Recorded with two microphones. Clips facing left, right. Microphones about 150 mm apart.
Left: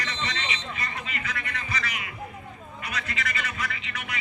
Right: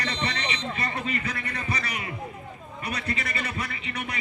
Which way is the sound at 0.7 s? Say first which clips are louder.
Right 5 dB; 30° right (ahead or behind).